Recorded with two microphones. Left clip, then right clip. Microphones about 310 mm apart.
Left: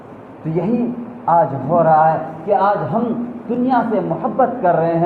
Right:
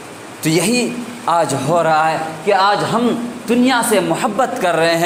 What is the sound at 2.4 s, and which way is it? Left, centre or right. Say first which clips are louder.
Speech: right 2 dB; right.